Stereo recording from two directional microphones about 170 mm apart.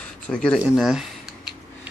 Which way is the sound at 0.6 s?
Centre (ahead or behind).